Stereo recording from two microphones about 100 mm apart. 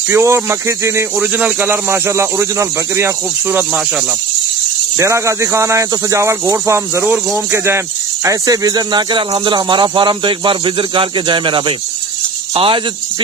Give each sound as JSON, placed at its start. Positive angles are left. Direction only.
{"t": 0.1, "sound": "speech", "side_deg": -25}
{"t": 1.1, "sound": "speech", "side_deg": -15}
{"t": 3.4, "sound": "speech", "side_deg": -15}
{"t": 4.9, "sound": "speech", "side_deg": -30}
{"t": 12.5, "sound": "speech", "side_deg": -70}